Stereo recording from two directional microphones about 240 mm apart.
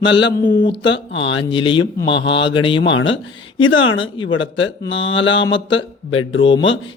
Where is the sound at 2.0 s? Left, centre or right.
Left.